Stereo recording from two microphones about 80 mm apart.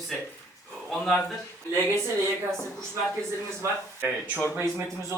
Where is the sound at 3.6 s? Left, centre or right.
Right.